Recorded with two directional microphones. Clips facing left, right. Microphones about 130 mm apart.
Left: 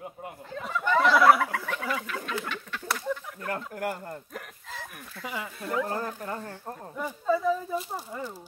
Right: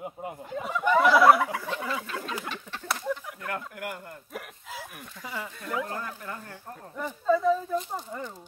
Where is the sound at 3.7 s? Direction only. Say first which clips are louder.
Left 5 dB; 40° left (ahead or behind).